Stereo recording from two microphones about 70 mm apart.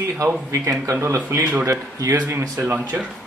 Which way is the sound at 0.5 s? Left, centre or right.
Right.